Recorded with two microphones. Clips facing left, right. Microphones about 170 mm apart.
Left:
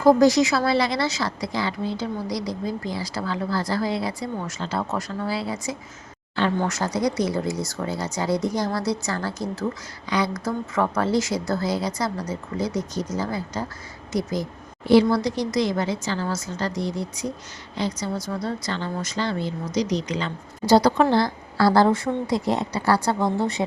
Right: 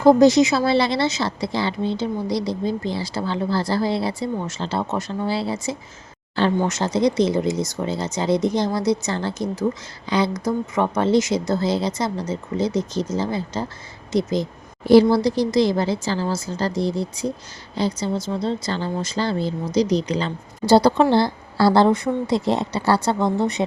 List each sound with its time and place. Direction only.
0.0 s a woman's voice: 20° right (ahead or behind)
14.8 s a woman's voice: 35° right (ahead or behind); by 23.6 s 20° right (ahead or behind)